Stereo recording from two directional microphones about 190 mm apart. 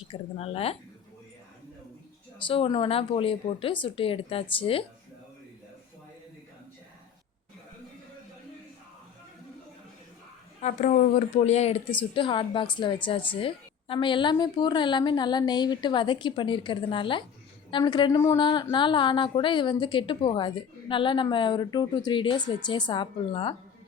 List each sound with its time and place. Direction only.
0.1 s speech: 30° left (ahead or behind)
2.5 s speech: 25° left (ahead or behind)
10.6 s speech: 40° left (ahead or behind)